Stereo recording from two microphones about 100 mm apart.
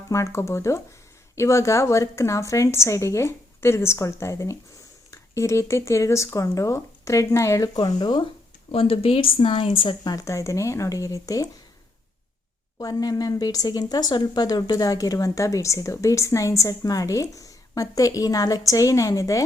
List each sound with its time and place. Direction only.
0.1 s a woman's voice: 30° left (ahead or behind)
7.9 s speech: 40° left (ahead or behind)
8.7 s speech: 75° left (ahead or behind)
10.0 s speech: 35° left (ahead or behind)
12.8 s speech: 40° left (ahead or behind)